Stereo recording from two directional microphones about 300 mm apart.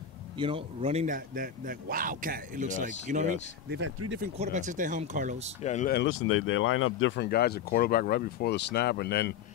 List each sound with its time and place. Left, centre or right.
0.4 s a man's voice: centre; by 3.9 s right
4.2 s a man's voice: right
5.6 s speech: left